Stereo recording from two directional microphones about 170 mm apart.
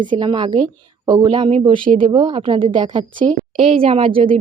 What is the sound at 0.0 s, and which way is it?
A woman's voice, 30° right (ahead or behind).